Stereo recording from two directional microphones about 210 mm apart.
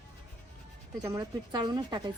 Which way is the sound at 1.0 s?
20° right (ahead or behind).